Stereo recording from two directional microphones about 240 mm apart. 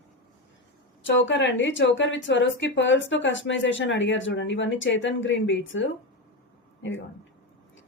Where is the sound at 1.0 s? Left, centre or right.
Left.